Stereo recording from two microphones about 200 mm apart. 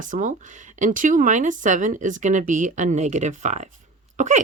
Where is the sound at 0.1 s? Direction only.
40° right (ahead or behind).